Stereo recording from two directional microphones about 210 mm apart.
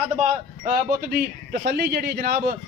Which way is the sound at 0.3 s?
45° right (ahead or behind).